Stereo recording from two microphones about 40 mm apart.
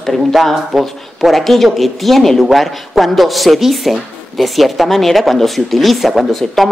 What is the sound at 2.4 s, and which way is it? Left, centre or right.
Speech, centre.